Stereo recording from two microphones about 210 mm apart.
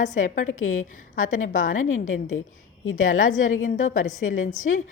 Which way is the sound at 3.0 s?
40° left (ahead or behind).